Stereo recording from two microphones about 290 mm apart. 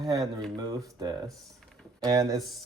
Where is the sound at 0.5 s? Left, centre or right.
Centre.